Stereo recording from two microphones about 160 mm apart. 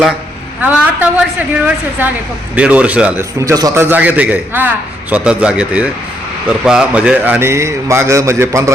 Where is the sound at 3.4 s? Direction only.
20° right (ahead or behind).